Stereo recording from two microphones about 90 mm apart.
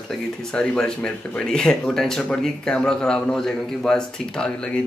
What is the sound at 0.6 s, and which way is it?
Speech, 10° left (ahead or behind).